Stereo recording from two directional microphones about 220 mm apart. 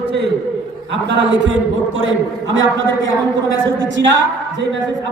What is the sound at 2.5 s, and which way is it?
Speech, 60° right (ahead or behind).